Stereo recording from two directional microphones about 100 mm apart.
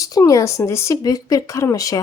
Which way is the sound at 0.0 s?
35° left (ahead or behind).